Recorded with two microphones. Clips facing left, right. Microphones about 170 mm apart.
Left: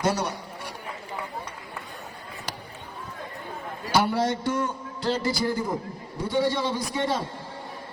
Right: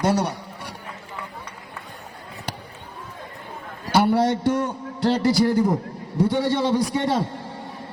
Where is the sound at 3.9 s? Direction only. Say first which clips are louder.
Right 5 dB; 60° right (ahead or behind).